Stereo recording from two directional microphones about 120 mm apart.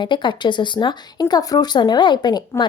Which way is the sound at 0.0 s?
40° left (ahead or behind).